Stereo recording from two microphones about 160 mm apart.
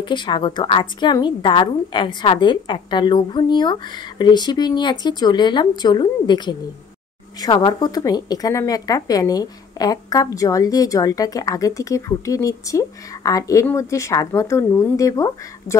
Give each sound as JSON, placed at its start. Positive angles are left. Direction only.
{"t": 0.0, "sound": "a woman's voice", "side_deg": 30}